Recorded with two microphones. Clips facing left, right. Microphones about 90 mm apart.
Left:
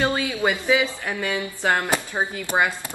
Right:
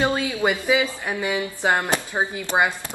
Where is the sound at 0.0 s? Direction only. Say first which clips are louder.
Right 1 dB; 15° right (ahead or behind).